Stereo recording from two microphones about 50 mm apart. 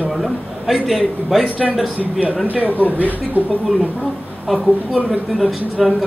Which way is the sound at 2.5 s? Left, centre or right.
Right.